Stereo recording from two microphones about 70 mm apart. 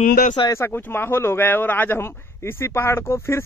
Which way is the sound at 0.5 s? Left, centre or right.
Left.